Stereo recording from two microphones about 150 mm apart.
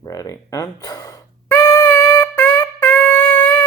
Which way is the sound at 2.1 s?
15° left (ahead or behind).